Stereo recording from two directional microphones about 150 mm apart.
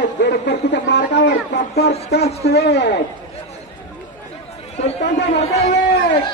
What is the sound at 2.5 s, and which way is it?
Speech, 90° left.